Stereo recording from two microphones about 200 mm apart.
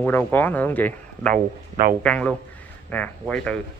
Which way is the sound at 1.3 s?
40° right (ahead or behind).